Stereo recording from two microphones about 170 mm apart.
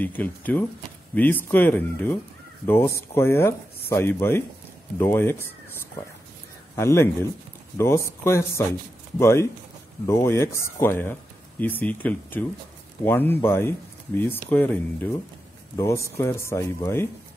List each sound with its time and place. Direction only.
0.0 s speech: 10° left (ahead or behind)
6.7 s a man's voice: 15° left (ahead or behind)